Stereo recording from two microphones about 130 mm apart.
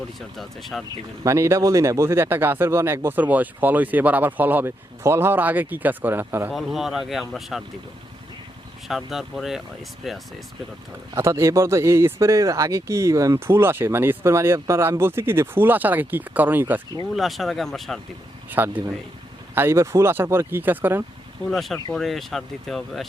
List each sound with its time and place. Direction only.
0.3 s speech: centre (ahead or behind)
1.2 s speech: 20° right (ahead or behind)
6.5 s speech: centre (ahead or behind)
8.9 s speech: centre (ahead or behind)
11.2 s speech: 25° right (ahead or behind)
17.2 s speech: centre (ahead or behind)
18.5 s speech: 15° right (ahead or behind)
21.5 s speech: centre (ahead or behind)